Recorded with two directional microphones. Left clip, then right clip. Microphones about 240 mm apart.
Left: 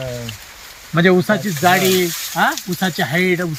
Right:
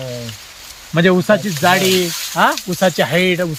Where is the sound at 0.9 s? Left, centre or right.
Centre.